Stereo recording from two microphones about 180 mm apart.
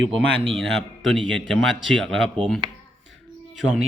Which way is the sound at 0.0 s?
90° right.